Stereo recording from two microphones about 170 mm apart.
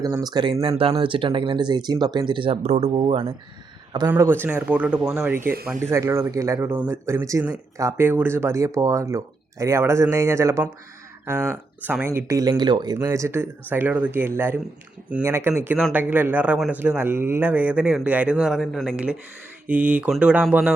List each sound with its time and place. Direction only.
0.0 s speech: 20° right (ahead or behind)
4.1 s speech: 10° right (ahead or behind)
11.8 s speech: 10° right (ahead or behind)